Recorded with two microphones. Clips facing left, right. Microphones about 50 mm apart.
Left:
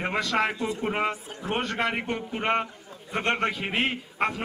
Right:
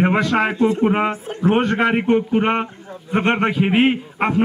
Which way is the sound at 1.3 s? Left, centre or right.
Right.